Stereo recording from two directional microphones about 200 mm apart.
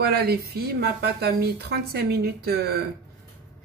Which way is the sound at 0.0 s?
50° right (ahead or behind).